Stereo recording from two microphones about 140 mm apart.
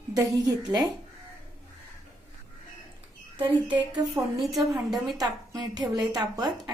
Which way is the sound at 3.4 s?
35° right (ahead or behind).